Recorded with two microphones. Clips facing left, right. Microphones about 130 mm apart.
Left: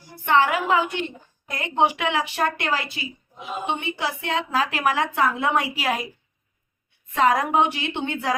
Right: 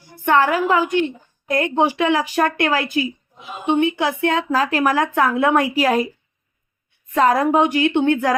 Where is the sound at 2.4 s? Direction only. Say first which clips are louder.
Right 6 dB; 55° right (ahead or behind); by 6.1 s 40° right (ahead or behind).